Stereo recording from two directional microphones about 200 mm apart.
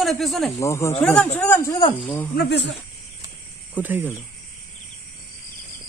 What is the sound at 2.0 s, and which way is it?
Speech, 10° left (ahead or behind).